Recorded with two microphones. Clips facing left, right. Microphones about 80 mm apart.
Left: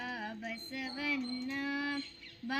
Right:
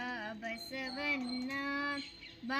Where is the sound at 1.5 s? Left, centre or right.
Right.